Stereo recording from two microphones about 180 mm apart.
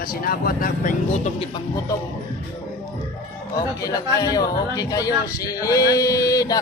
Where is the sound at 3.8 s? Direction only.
20° left (ahead or behind).